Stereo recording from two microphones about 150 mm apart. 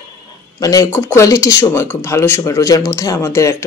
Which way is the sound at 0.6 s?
25° left (ahead or behind).